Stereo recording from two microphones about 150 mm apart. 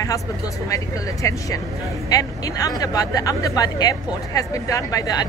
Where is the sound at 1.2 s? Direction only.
20° left (ahead or behind).